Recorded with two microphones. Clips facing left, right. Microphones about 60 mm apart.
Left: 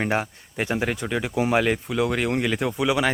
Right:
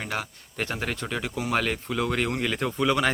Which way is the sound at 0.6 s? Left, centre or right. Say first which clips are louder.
Left 5 dB; centre.